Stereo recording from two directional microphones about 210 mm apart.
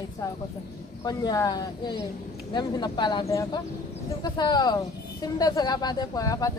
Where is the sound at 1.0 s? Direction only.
15° left (ahead or behind).